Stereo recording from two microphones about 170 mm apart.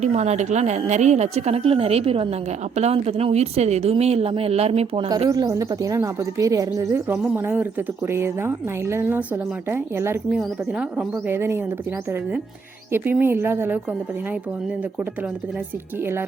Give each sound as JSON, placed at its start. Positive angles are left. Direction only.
{"t": 0.0, "sound": "a woman's voice", "side_deg": -40}
{"t": 5.0, "sound": "a woman's voice", "side_deg": -25}
{"t": 12.9, "sound": "a woman's voice", "side_deg": -10}